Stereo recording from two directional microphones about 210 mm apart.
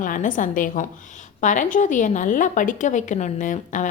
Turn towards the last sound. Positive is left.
turn(degrees=35)  # may be behind; listen again after turning